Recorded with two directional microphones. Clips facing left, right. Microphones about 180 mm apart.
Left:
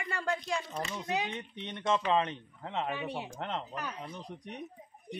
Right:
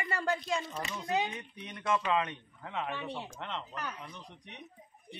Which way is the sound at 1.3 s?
25° left (ahead or behind).